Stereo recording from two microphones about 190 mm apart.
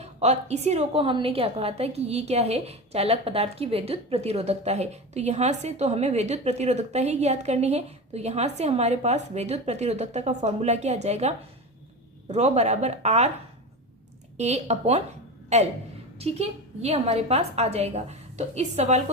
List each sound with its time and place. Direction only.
0.0 s a woman's voice: 35° right (ahead or behind)
14.3 s a woman's voice: 35° right (ahead or behind)